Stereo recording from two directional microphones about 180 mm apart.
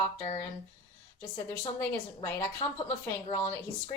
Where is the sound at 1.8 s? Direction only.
15° left (ahead or behind).